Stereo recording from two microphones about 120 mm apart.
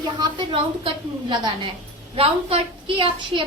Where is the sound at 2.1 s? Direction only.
55° right (ahead or behind).